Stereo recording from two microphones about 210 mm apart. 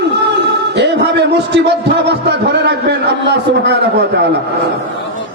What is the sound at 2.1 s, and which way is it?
A man's voice, 55° right (ahead or behind).